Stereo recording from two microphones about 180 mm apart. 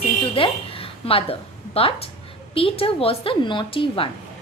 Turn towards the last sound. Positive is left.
turn(degrees=30)  # may be behind; listen again after turning